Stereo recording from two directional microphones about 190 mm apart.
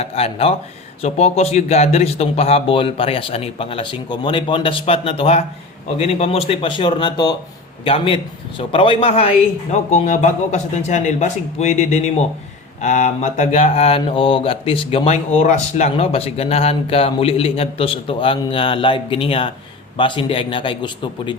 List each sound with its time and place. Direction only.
0.0 s speech: 30° left (ahead or behind)